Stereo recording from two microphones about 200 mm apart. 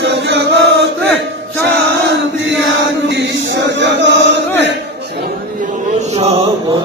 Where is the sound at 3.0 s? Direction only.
60° right (ahead or behind).